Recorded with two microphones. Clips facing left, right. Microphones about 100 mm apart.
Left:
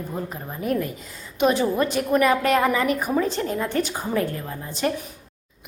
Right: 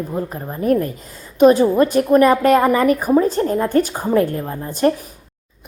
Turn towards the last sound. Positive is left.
turn(degrees=-45)  # may be behind; listen again after turning